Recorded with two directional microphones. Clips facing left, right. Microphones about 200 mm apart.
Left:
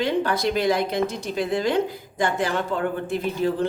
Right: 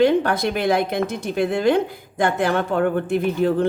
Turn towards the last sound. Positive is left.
turn(degrees=-55)  # may be behind; listen again after turning